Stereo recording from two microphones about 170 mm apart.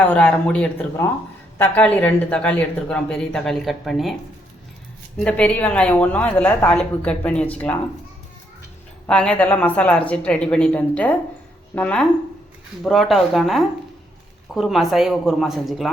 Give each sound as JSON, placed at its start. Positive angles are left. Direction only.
{"t": 0.0, "sound": "a woman's voice", "side_deg": 10}
{"t": 5.1, "sound": "a woman's voice", "side_deg": 5}
{"t": 9.0, "sound": "a woman's voice", "side_deg": 5}